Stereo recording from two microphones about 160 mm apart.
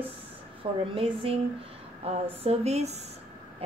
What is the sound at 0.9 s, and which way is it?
A woman's voice, 35° right (ahead or behind).